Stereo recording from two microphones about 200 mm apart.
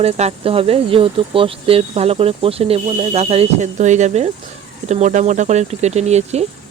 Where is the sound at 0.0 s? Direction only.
30° right (ahead or behind).